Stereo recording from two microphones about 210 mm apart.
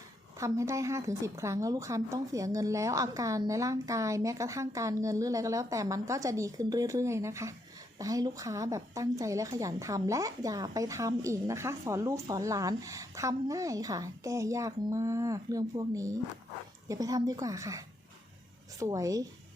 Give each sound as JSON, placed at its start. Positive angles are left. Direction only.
{"t": 0.3, "sound": "a woman's voice", "side_deg": -15}